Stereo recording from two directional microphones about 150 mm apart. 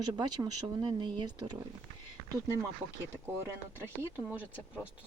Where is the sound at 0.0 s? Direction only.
25° right (ahead or behind).